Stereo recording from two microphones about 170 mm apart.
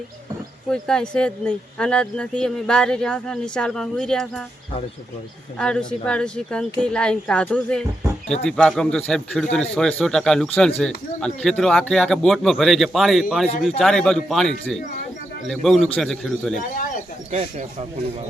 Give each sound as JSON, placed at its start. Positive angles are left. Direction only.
{"t": 0.7, "sound": "speech", "side_deg": 5}
{"t": 5.5, "sound": "speech", "side_deg": 5}
{"t": 17.3, "sound": "speech", "side_deg": -35}